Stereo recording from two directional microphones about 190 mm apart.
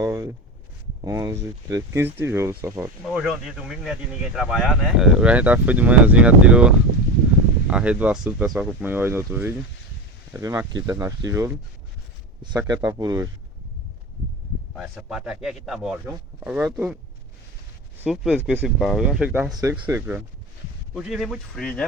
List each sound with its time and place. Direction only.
0.0 s a sound: 20° right (ahead or behind)
1.0 s speech: 15° right (ahead or behind)
3.0 s speech: centre (ahead or behind); by 13.2 s 15° right (ahead or behind)
14.8 s speech: 5° right (ahead or behind)
18.0 s speech: centre (ahead or behind)